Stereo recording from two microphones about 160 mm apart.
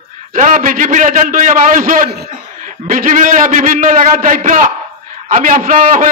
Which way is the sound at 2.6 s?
60° right (ahead or behind).